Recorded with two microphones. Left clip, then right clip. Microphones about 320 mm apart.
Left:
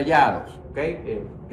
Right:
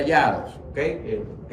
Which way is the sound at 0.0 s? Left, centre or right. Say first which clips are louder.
Left 1 dB; centre.